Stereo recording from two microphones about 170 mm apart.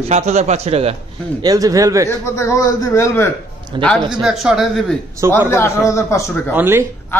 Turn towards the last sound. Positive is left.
turn(degrees=-10)  # may be behind; listen again after turning